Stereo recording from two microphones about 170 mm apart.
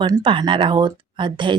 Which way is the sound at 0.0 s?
25° right (ahead or behind).